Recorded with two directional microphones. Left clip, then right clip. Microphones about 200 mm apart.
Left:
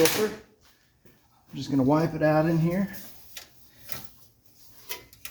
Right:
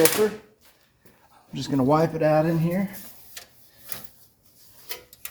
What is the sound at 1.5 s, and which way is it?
Speech, 50° right (ahead or behind).